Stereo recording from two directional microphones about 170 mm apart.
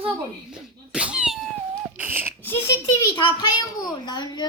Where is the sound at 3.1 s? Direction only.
25° left (ahead or behind).